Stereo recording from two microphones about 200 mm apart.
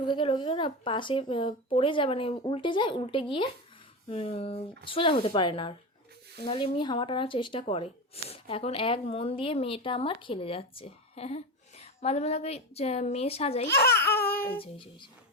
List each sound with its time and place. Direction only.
0.0 s speech: 25° left (ahead or behind)
13.7 s speech: 55° left (ahead or behind)